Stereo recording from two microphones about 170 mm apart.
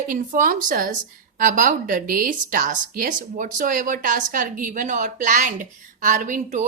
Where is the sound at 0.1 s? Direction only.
50° right (ahead or behind).